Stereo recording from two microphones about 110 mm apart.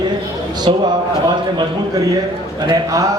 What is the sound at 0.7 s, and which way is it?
Speech, 50° right (ahead or behind).